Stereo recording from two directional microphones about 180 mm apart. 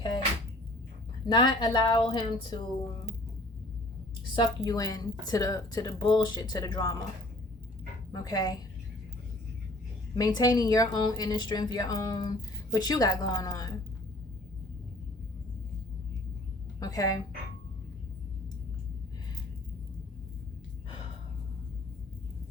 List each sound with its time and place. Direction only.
1.3 s a woman's voice: 25° left (ahead or behind)
4.4 s a woman's voice: 20° left (ahead or behind)
8.1 s a woman's voice: 20° left (ahead or behind)
10.2 s a woman's voice: 20° left (ahead or behind)
16.8 s a woman's voice: 20° left (ahead or behind)